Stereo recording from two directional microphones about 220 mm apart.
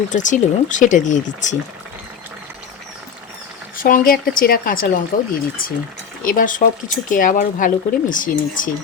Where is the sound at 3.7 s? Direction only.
40° left (ahead or behind).